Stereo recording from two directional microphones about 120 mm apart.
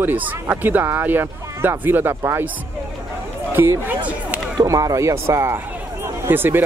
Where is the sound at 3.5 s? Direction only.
15° right (ahead or behind).